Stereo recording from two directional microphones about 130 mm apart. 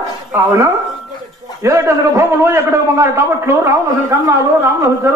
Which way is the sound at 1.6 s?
25° right (ahead or behind).